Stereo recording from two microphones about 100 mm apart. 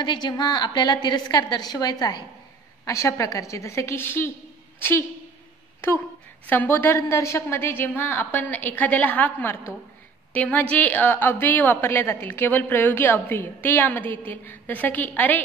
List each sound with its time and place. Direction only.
0.0 s a woman's voice: 45° left (ahead or behind)
2.8 s a woman's voice: 30° left (ahead or behind)
6.5 s a woman's voice: 20° left (ahead or behind)